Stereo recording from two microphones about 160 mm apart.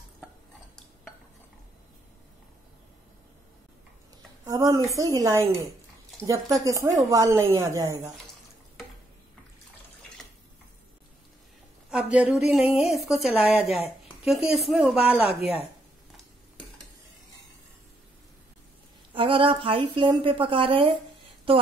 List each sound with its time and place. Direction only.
4.5 s a woman's voice: 20° right (ahead or behind)
11.9 s a woman's voice: 5° right (ahead or behind)
19.1 s a woman's voice: 35° right (ahead or behind)